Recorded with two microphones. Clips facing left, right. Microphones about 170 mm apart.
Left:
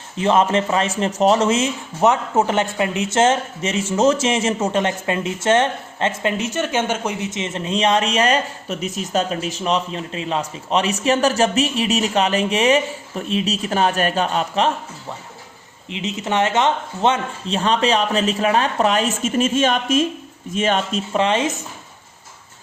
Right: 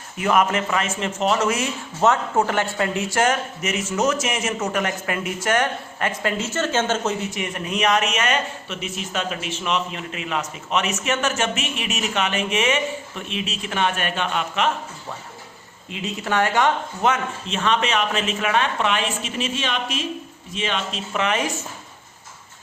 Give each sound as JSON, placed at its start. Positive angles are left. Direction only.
{"t": 0.2, "sound": "a man's voice", "side_deg": 25}
{"t": 15.9, "sound": "a man's voice", "side_deg": 20}
{"t": 21.1, "sound": "speech", "side_deg": 30}